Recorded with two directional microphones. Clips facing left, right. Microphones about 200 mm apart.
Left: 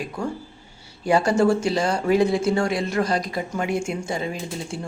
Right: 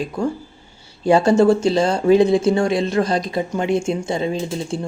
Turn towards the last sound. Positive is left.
turn(degrees=-25)  # may be behind; listen again after turning